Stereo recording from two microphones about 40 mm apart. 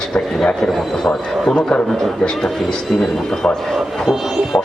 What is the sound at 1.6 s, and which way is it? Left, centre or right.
Speech, left.